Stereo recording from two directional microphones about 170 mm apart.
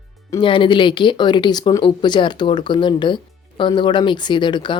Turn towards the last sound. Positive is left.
turn(degrees=25)  # may be behind; listen again after turning